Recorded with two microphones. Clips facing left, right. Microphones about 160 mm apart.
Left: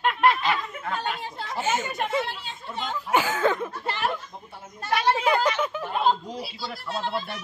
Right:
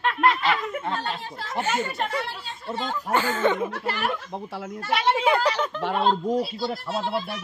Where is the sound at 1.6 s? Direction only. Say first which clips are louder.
Right 1 dB; 20° left (ahead or behind).